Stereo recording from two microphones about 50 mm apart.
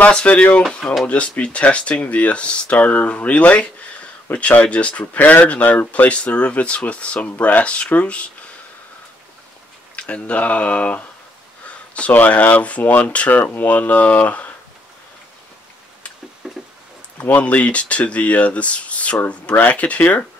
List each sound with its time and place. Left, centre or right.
0.0 s speech: left
9.9 s speech: left
11.6 s a sound: left
12.1 s speech: left
16.4 s a sound: centre
17.2 s speech: left